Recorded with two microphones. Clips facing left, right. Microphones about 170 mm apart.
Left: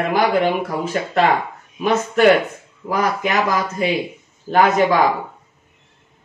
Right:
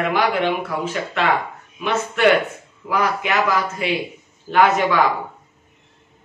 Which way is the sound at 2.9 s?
40° left (ahead or behind).